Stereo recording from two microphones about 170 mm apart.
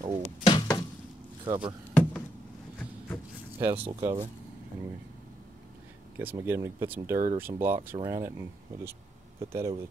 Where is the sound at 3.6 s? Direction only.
20° right (ahead or behind).